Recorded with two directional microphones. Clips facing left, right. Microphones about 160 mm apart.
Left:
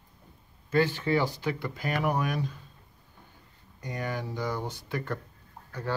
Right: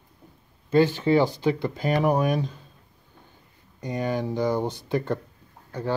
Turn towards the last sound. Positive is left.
turn(degrees=-20)  # may be behind; listen again after turning